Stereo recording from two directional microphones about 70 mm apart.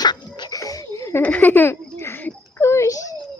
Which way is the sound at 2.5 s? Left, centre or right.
Left.